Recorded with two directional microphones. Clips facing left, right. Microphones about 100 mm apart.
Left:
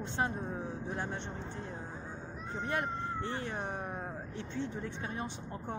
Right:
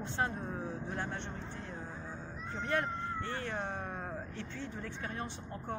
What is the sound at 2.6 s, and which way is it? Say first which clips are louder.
Speech: right 1 dB; 20° left (ahead or behind).